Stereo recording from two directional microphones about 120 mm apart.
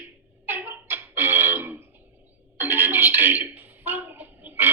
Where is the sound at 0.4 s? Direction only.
15° right (ahead or behind).